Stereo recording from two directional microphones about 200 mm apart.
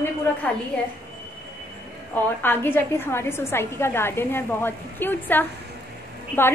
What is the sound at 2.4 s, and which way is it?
A woman's voice, 10° left (ahead or behind).